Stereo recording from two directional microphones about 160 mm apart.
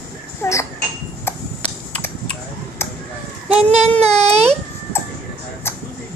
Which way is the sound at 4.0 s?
40° right (ahead or behind).